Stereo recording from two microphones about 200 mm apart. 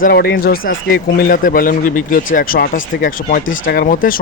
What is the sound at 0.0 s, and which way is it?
A man's voice, 50° left (ahead or behind).